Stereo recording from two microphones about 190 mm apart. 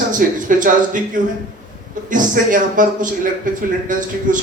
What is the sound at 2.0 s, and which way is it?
A man's voice, 45° right (ahead or behind).